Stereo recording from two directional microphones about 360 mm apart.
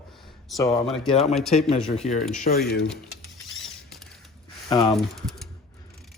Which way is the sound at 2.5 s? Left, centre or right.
Left.